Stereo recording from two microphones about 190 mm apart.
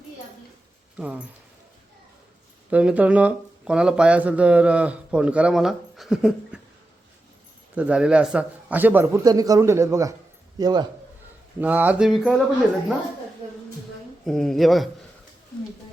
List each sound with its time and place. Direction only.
0.9 s speech: 10° right (ahead or behind)
2.6 s speech: 5° right (ahead or behind)
7.8 s a man's voice: 5° right (ahead or behind); by 10.8 s 20° right (ahead or behind)
11.6 s speech: 10° right (ahead or behind)
14.3 s speech: centre (ahead or behind)